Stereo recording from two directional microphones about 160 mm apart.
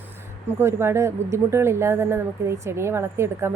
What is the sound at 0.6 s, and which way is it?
A woman's voice, 15° right (ahead or behind).